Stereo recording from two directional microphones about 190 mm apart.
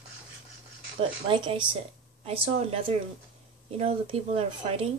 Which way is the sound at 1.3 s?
25° right (ahead or behind).